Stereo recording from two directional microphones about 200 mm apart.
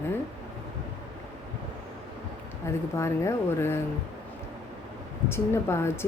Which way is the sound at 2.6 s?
15° left (ahead or behind).